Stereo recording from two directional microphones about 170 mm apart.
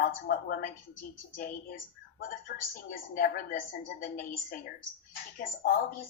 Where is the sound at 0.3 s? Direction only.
55° left (ahead or behind).